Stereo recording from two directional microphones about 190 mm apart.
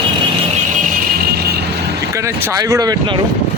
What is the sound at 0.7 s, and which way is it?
Music, 50° right (ahead or behind).